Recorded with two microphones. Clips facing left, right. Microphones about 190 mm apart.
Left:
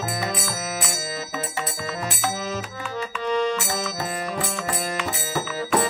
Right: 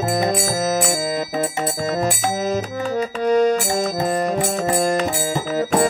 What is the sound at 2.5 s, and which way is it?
Music, 40° right (ahead or behind).